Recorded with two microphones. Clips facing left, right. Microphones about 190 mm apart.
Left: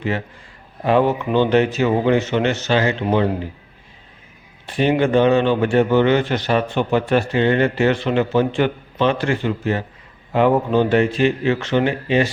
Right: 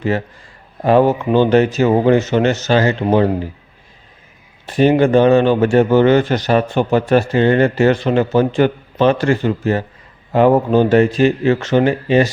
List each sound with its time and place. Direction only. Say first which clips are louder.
0.9 s a man's voice: right 4 dB; 40° right (ahead or behind)
4.6 s a man's voice: right 5 dB; 40° right (ahead or behind)